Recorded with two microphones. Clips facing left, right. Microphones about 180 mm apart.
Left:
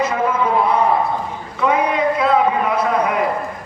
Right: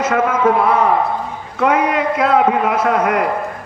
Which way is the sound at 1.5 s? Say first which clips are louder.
Right 2 dB; 80° right.